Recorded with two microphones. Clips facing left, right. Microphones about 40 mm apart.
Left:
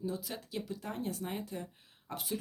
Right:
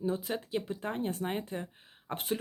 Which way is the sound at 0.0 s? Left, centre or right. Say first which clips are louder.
Right 6 dB; right.